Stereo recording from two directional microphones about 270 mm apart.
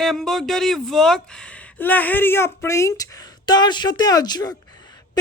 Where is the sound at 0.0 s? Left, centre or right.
Centre.